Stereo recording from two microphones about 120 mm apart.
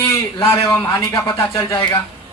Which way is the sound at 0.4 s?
25° left (ahead or behind).